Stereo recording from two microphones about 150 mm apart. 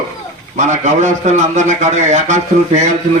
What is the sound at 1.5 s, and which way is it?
A man's voice, 50° right (ahead or behind).